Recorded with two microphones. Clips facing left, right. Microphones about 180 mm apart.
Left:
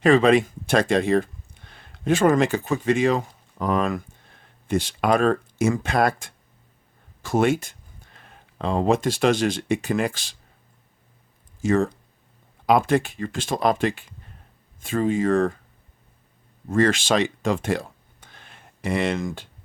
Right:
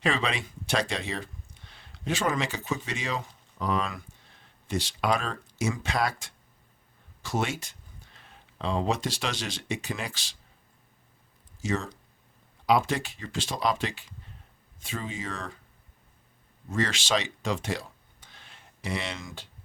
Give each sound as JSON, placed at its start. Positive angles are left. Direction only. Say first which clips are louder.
{"t": 0.0, "sound": "speech", "louder": "left 13 dB", "side_deg": 50}
{"t": 11.6, "sound": "speech", "louder": "left 10 dB", "side_deg": 50}
{"t": 16.6, "sound": "speech", "louder": "left 9 dB", "side_deg": 50}